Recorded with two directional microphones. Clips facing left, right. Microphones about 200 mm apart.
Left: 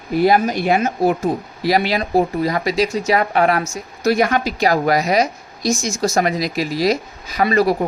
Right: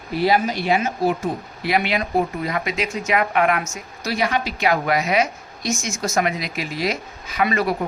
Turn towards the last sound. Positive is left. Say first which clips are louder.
# left 5 dB
turn(degrees=35)  # may be behind; listen again after turning